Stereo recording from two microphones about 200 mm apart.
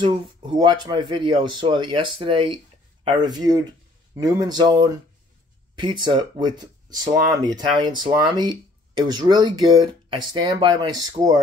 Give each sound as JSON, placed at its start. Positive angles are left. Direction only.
{"t": 0.0, "sound": "speech", "side_deg": -20}